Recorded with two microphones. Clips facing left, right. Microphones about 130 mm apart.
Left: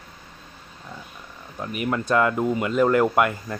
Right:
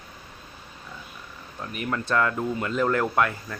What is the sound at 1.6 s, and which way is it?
Speech, 15° left (ahead or behind).